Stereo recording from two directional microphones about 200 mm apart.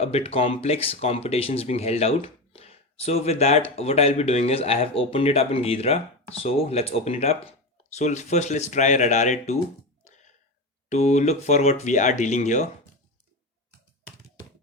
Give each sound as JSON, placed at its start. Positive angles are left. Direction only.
{"t": 0.0, "sound": "speech", "side_deg": 30}
{"t": 10.0, "sound": "a sound", "side_deg": 35}
{"t": 10.8, "sound": "speech", "side_deg": 35}